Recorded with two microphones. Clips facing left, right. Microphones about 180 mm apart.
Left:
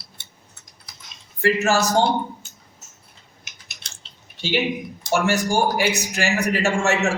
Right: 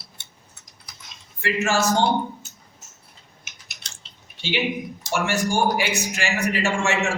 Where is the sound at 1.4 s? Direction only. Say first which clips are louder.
Left 4 dB; 40° left (ahead or behind).